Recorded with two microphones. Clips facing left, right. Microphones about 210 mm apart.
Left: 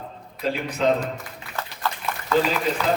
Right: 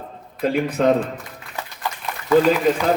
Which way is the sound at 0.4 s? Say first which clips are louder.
Right 5 dB; 55° right (ahead or behind).